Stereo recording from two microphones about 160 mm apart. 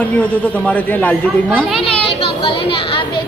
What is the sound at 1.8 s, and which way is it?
Chatter, 35° left (ahead or behind).